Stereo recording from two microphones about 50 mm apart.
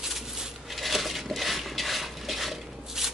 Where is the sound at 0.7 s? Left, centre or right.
Centre.